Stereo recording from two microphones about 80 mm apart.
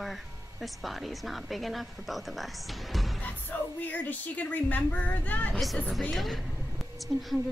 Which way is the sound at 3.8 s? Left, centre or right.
Left.